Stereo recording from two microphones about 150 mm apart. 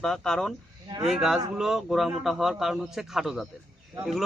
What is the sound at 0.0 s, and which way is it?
A man's voice, 5° left (ahead or behind).